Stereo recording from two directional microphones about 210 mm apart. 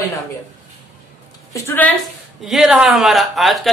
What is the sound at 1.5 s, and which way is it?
Speech, 10° left (ahead or behind).